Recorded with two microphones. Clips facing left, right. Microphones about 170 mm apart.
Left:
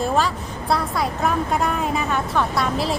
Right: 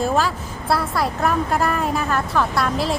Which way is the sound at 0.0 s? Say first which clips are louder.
Right 1 dB; centre (ahead or behind).